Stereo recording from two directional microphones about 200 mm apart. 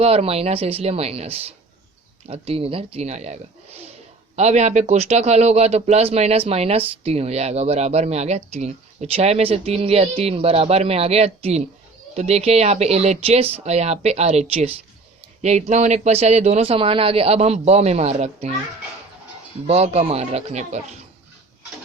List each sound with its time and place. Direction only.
0.0 s a man's voice: 30° right (ahead or behind)
19.6 s a man's voice: 30° right (ahead or behind)